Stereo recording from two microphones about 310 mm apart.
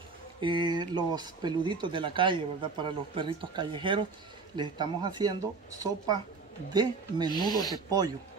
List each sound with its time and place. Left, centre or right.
0.4 s speech: centre
7.2 s speech: left